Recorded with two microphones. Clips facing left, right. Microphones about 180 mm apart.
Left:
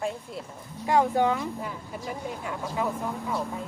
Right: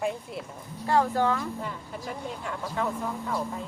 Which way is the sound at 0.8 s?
15° left (ahead or behind).